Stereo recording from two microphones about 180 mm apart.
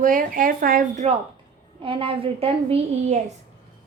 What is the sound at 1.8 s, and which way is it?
A woman's voice, 30° right (ahead or behind).